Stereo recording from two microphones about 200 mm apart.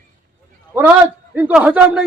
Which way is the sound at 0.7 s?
10° right (ahead or behind).